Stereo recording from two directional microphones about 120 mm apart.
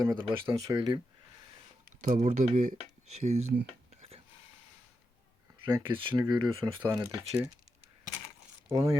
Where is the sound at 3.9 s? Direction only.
60° right (ahead or behind).